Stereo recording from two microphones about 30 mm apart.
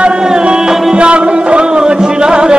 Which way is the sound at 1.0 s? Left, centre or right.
Right.